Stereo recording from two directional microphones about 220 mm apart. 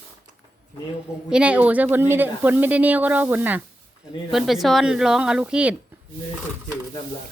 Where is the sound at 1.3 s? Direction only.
5° right (ahead or behind).